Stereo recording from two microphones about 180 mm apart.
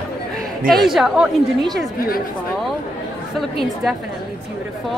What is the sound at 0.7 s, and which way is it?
Speech, centre (ahead or behind).